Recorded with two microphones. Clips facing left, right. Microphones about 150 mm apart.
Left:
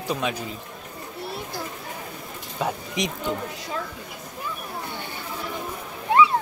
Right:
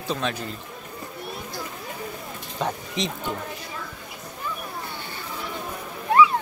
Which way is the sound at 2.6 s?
10° left (ahead or behind).